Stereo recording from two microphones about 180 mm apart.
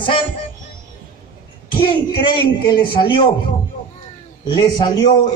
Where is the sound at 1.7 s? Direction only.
25° left (ahead or behind).